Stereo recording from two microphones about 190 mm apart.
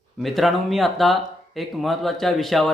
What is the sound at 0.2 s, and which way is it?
Speech, centre (ahead or behind).